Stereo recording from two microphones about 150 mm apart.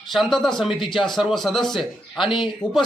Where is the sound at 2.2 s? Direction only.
35° left (ahead or behind).